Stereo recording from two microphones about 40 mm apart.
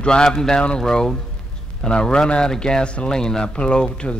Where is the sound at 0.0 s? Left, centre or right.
Centre.